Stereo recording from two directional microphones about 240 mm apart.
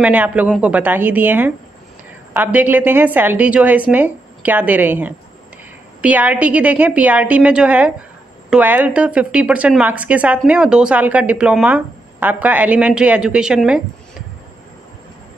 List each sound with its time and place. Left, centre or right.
0.0 s a woman's voice: centre